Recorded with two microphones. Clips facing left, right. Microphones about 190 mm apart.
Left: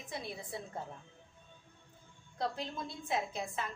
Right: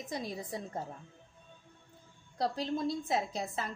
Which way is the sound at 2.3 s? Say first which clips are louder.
Right 5 dB; 35° right (ahead or behind).